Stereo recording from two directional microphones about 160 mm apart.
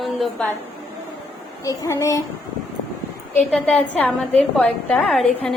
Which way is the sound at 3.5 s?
5° left (ahead or behind).